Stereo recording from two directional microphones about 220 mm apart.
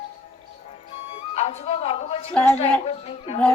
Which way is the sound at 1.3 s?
30° left (ahead or behind).